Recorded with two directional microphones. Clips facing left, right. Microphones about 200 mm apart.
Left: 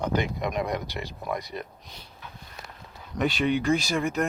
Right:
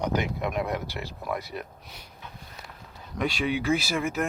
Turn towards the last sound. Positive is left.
turn(degrees=0)  # may be behind; listen again after turning